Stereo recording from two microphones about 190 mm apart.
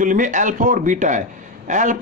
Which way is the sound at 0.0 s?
45° right (ahead or behind).